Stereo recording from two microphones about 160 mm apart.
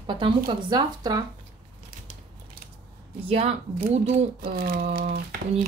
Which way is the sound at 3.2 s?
40° right (ahead or behind).